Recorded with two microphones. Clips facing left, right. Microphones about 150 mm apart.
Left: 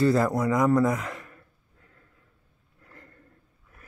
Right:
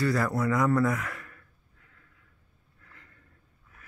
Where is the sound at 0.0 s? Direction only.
25° left (ahead or behind).